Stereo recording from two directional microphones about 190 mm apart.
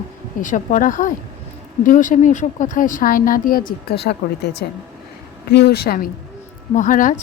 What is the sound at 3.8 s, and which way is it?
A woman's voice, 60° left (ahead or behind).